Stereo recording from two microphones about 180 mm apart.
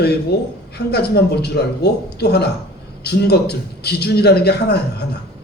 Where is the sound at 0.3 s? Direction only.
65° left (ahead or behind).